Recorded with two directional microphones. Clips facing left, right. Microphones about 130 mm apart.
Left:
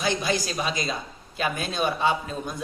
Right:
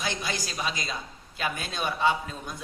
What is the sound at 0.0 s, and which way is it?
A man's voice, 20° left (ahead or behind).